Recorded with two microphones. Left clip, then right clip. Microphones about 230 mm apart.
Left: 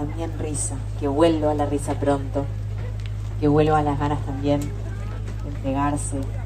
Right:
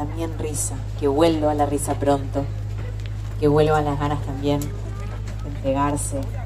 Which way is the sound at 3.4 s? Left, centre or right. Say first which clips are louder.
Right 1 dB; right.